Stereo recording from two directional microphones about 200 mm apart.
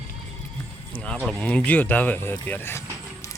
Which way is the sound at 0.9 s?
5° left (ahead or behind).